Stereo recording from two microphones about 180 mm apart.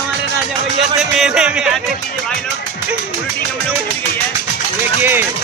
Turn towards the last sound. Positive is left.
turn(degrees=-10)  # may be behind; listen again after turning